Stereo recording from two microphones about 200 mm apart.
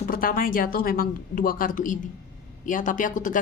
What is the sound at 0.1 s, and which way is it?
A woman's voice, 45° left (ahead or behind).